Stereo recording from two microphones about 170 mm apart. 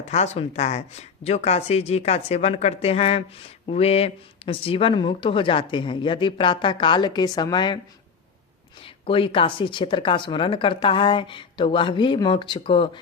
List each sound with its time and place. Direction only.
0.0 s speech: 40° left (ahead or behind)
8.8 s speech: 30° left (ahead or behind)